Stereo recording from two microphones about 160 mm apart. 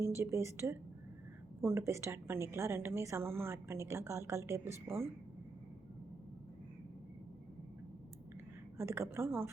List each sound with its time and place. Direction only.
0.0 s a woman's voice: 15° right (ahead or behind)
8.8 s a woman's voice: 15° right (ahead or behind)